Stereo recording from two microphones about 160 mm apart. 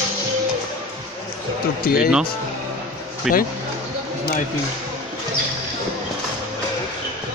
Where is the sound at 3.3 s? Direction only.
Centre (ahead or behind).